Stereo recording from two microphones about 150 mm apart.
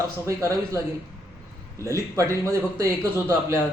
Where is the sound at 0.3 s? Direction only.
20° right (ahead or behind).